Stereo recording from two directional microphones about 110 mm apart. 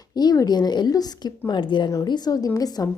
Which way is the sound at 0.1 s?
35° left (ahead or behind).